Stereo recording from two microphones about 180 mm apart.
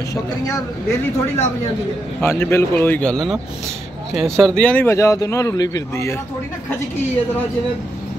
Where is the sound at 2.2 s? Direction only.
15° left (ahead or behind).